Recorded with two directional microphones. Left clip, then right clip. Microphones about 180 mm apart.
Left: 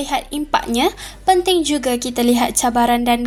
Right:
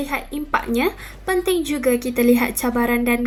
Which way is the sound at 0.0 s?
30° left (ahead or behind).